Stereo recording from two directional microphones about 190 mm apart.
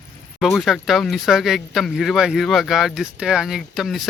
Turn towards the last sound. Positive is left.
turn(degrees=0)  # may be behind; listen again after turning